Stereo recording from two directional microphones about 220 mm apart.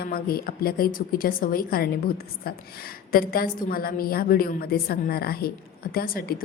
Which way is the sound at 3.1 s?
40° left (ahead or behind).